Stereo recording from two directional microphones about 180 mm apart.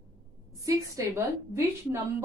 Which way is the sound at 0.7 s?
15° right (ahead or behind).